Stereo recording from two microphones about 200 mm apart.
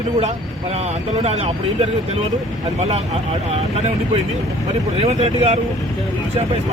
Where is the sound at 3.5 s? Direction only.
30° right (ahead or behind).